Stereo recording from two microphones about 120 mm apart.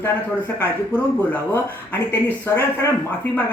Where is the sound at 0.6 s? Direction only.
15° left (ahead or behind).